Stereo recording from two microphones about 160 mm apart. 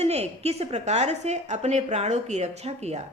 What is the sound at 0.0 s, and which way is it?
A woman's voice, 40° right (ahead or behind).